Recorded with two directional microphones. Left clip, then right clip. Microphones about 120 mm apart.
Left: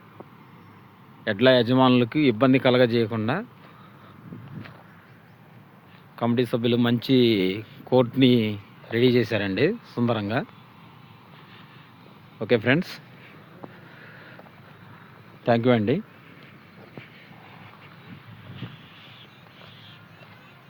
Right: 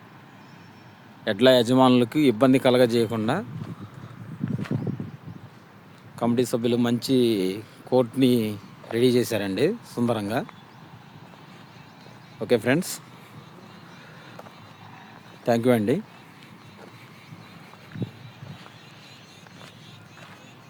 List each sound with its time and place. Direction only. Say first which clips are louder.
1.2 s speech: right 1 dB; 25° right (ahead or behind)
6.1 s speech: even; 15° right (ahead or behind)
12.4 s speech: left 1 dB; 15° right (ahead or behind)
15.4 s speech: even; 15° right (ahead or behind)